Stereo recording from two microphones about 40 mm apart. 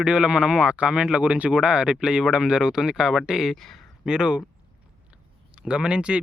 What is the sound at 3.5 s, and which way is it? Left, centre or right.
Speech, centre.